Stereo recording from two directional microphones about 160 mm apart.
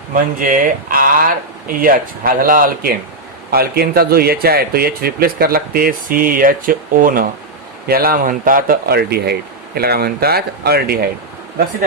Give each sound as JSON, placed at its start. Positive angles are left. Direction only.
{"t": 0.1, "sound": "speech", "side_deg": -55}
{"t": 3.5, "sound": "speech", "side_deg": -75}